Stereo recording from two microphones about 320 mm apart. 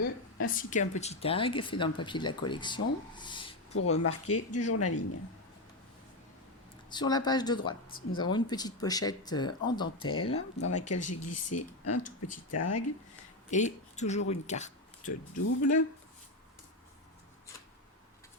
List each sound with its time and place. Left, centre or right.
0.0 s a sound: left
0.5 s speech: left
4.0 s speech: left
6.9 s speech: centre
10.0 s speech: left
10.2 s speech: centre
10.7 s speech: left
13.5 s speech: left
15.4 s speech: left